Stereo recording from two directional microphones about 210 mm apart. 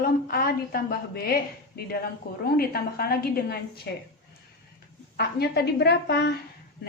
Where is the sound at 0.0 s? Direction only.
45° left (ahead or behind).